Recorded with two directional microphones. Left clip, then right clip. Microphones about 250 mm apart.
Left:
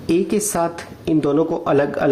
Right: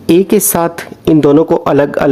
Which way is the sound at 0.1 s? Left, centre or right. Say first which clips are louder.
Right 9 dB; right.